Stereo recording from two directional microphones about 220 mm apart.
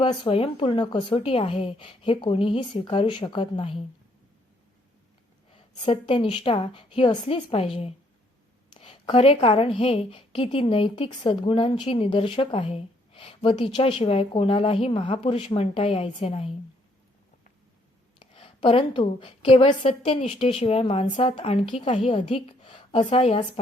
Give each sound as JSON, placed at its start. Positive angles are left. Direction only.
{"t": 0.0, "sound": "a woman's voice", "side_deg": 25}
{"t": 5.8, "sound": "a woman's voice", "side_deg": 20}
{"t": 18.2, "sound": "a woman's voice", "side_deg": 25}